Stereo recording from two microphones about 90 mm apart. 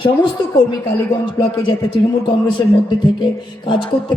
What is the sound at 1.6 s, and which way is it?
A man's voice, 65° left (ahead or behind).